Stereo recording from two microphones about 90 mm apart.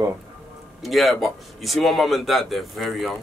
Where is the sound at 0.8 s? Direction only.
Centre (ahead or behind).